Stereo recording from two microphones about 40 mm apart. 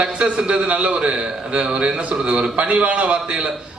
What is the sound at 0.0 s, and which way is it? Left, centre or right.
A man's voice, right.